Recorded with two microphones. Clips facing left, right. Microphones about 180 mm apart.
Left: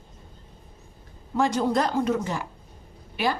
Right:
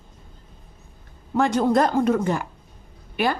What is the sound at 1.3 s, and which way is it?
A woman's voice, 60° right (ahead or behind).